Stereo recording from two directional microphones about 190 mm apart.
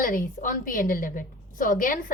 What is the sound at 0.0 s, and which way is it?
A woman's voice, 45° left (ahead or behind).